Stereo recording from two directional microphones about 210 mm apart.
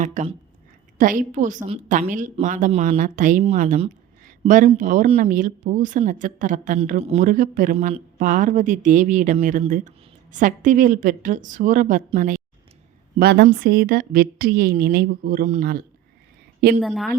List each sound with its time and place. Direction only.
0.0 s a woman's voice: 35° right (ahead or behind)
13.1 s speech: 50° right (ahead or behind)
16.8 s a woman's voice: centre (ahead or behind)